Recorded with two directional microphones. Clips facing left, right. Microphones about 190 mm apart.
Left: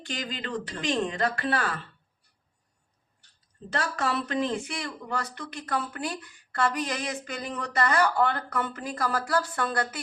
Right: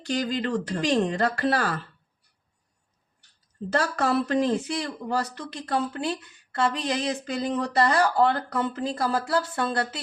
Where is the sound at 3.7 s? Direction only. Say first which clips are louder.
Right 5 dB; 40° right (ahead or behind).